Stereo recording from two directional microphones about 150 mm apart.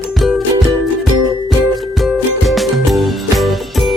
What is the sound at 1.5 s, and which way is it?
Music, centre (ahead or behind).